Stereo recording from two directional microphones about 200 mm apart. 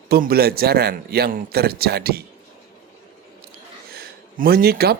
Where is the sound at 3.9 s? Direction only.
50° right (ahead or behind).